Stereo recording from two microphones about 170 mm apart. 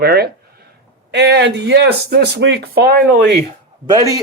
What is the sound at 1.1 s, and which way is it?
Speech, 85° right.